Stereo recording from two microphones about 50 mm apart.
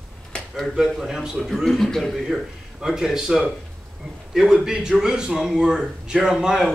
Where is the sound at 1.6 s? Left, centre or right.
Centre.